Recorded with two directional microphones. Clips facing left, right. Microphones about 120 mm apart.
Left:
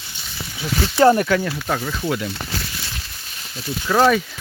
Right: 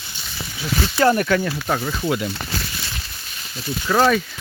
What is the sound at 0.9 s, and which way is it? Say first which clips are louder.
Speech: left 4 dB; 25° left (ahead or behind).